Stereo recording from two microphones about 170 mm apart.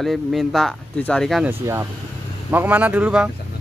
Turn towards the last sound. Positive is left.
turn(degrees=-10)  # may be behind; listen again after turning